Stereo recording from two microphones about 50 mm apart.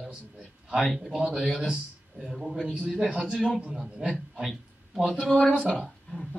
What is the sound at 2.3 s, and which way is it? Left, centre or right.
Speech, centre.